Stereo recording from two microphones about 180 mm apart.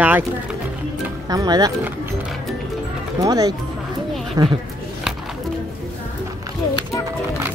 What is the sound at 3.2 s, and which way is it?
Speech, 20° right (ahead or behind).